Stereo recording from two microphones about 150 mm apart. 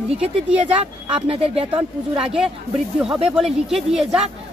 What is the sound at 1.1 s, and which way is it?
Speech, 40° right (ahead or behind).